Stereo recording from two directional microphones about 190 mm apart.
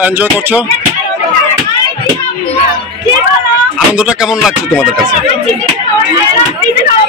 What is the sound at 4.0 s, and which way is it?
Speech, 5° right (ahead or behind).